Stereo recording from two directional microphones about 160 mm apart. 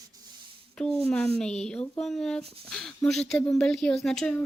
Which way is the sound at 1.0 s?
5° left (ahead or behind).